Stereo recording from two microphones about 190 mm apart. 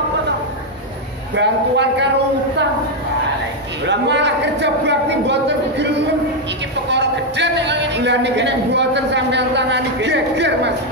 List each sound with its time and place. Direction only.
1.3 s a man's voice: 65° right (ahead or behind)
3.8 s a man's voice: 65° right (ahead or behind)
6.9 s a man's voice: 65° right (ahead or behind)